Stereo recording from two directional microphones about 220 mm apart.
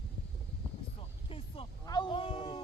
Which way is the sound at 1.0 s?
25° left (ahead or behind).